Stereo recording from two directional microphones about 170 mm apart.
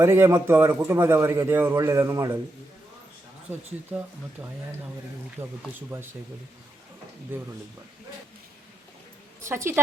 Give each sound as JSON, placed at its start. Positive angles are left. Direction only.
{"t": 0.0, "sound": "a man's voice", "side_deg": -15}
{"t": 3.5, "sound": "a man's voice", "side_deg": -10}
{"t": 5.4, "sound": "a man's voice", "side_deg": -15}
{"t": 7.3, "sound": "a man's voice", "side_deg": -10}
{"t": 9.5, "sound": "a man's voice", "side_deg": -15}